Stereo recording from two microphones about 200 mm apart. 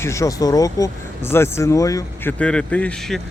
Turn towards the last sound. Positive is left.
turn(degrees=0)  # may be behind; listen again after turning